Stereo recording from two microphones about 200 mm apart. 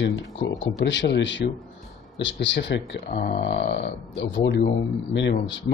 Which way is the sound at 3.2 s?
45° left (ahead or behind).